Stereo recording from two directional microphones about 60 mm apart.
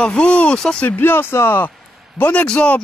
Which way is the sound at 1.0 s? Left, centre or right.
Left.